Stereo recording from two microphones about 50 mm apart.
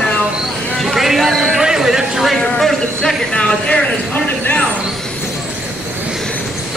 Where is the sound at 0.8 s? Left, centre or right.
Centre.